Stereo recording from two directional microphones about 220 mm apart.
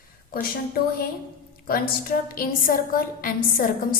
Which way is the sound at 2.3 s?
40° left (ahead or behind).